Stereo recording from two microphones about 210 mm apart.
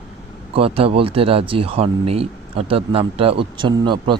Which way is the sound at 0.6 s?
25° right (ahead or behind).